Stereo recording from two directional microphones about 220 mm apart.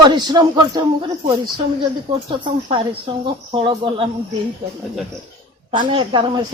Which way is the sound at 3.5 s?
25° right (ahead or behind).